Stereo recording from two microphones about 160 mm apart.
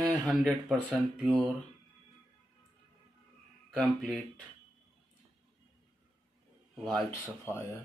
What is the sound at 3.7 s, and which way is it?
Speech, 5° left (ahead or behind).